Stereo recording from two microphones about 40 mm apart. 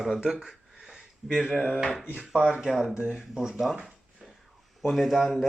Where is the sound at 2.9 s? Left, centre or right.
Centre.